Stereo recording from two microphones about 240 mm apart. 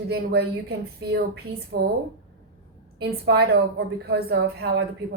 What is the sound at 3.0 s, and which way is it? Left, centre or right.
A woman's voice, right.